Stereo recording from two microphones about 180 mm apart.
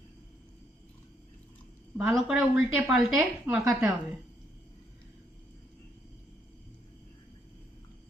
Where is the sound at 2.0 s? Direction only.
5° right (ahead or behind).